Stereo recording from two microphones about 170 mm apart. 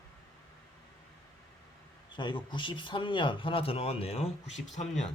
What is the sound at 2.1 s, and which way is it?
Speech, 25° left (ahead or behind).